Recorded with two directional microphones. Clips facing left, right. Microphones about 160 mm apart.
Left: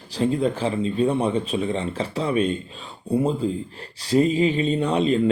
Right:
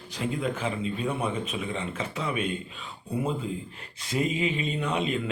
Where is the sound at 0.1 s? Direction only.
35° left (ahead or behind).